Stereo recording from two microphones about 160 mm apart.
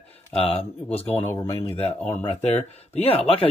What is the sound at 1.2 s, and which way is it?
Speech, 15° left (ahead or behind).